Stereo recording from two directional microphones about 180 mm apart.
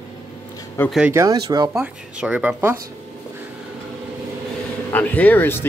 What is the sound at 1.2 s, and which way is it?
Speech, 20° right (ahead or behind).